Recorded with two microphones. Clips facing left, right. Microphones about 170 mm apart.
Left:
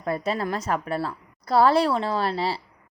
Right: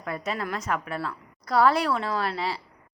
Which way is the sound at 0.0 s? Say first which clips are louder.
Left 5 dB; 35° left (ahead or behind).